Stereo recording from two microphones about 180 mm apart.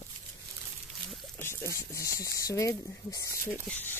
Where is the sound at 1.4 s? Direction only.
15° left (ahead or behind).